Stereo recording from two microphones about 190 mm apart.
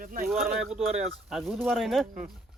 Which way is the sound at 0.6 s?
Centre (ahead or behind).